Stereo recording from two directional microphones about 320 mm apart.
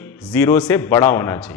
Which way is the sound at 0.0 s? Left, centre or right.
Centre.